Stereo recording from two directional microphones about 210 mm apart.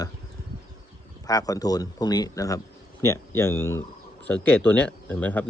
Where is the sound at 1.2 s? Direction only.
15° left (ahead or behind).